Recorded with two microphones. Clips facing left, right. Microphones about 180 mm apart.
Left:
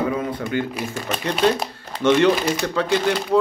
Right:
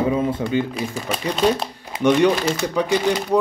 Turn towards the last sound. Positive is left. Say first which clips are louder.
# right 1 dB
turn(degrees=-15)  # may be behind; listen again after turning